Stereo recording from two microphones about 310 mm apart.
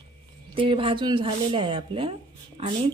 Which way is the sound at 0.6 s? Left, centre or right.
Centre.